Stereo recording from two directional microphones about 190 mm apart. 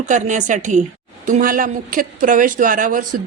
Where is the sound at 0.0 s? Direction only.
40° right (ahead or behind).